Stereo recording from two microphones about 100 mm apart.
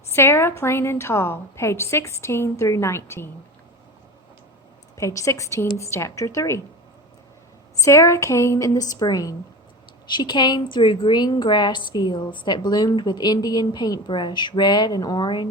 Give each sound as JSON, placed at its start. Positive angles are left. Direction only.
{"t": 0.1, "sound": "a woman's voice", "side_deg": 25}
{"t": 4.9, "sound": "a woman's voice", "side_deg": 30}
{"t": 7.8, "sound": "a woman's voice", "side_deg": 30}